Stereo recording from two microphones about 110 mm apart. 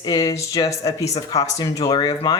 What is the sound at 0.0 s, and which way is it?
Speech, 30° left (ahead or behind).